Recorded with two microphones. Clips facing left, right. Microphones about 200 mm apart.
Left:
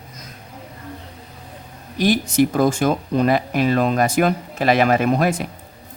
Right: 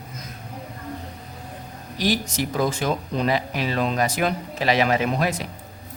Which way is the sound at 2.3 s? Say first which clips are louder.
Left 7 dB; 55° left (ahead or behind).